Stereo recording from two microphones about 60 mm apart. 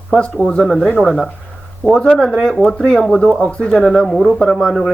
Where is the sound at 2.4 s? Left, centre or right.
Centre.